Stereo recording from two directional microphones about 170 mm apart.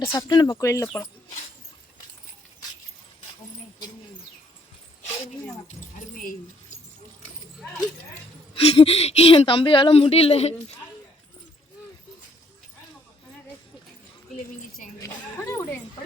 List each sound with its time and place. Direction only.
0.0 s speech: 15° left (ahead or behind)
8.6 s speech: 35° left (ahead or behind)
15.0 s speech: 15° left (ahead or behind)